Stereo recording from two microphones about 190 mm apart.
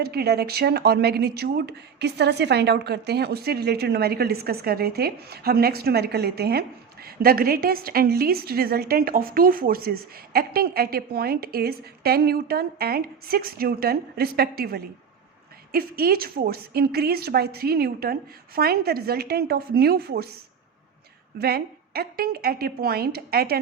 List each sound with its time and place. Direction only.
0.0 s speech: 55° right (ahead or behind)
21.3 s a woman's voice: 55° right (ahead or behind)